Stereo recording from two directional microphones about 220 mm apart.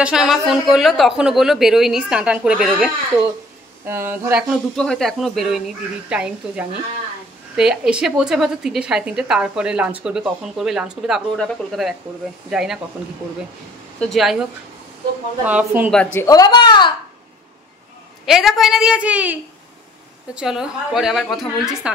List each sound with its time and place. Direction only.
0.0 s a woman's voice: centre (ahead or behind)
13.9 s a woman's voice: centre (ahead or behind)
15.4 s speech: 5° right (ahead or behind)
15.9 s a woman's voice: 5° left (ahead or behind)
18.2 s a woman's voice: centre (ahead or behind)
20.3 s a woman's voice: 5° right (ahead or behind)